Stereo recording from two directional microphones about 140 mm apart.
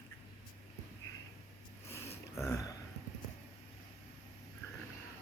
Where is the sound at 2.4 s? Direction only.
20° left (ahead or behind).